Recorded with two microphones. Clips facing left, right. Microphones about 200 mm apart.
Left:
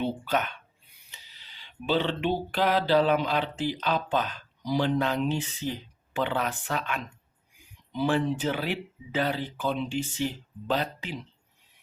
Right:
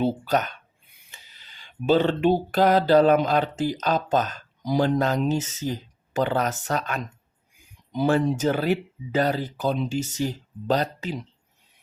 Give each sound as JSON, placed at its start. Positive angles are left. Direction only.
{"t": 0.0, "sound": "speech", "side_deg": -40}
{"t": 1.1, "sound": "a sound", "side_deg": -50}
{"t": 7.9, "sound": "speech", "side_deg": -45}